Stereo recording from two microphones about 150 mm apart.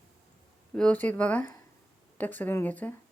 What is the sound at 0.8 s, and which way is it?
A woman's voice, 10° left (ahead or behind).